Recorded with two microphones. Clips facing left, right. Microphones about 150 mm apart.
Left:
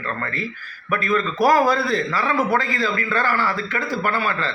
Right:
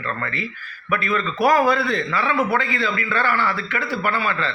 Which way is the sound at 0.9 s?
40° left (ahead or behind).